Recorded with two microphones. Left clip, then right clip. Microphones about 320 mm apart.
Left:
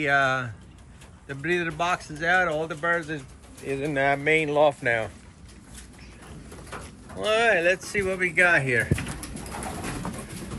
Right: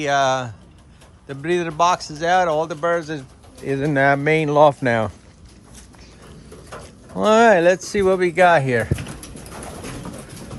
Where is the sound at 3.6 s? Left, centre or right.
Right.